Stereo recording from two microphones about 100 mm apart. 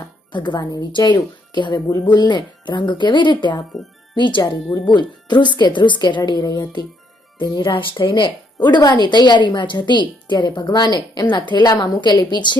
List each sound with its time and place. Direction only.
0.3 s speech: 50° left (ahead or behind)